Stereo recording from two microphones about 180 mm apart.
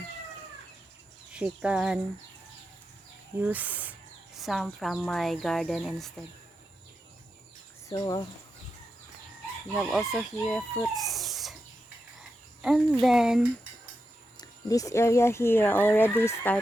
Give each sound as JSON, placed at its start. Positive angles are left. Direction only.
{"t": 1.3, "sound": "speech", "side_deg": -5}
{"t": 3.3, "sound": "speech", "side_deg": -10}
{"t": 7.9, "sound": "speech", "side_deg": 20}
{"t": 9.7, "sound": "speech", "side_deg": 0}
{"t": 12.6, "sound": "speech", "side_deg": 0}
{"t": 14.3, "sound": "speech", "side_deg": 20}